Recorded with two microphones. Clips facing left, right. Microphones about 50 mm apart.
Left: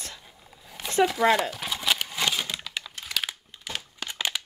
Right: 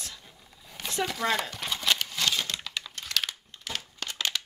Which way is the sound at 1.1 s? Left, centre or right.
Centre.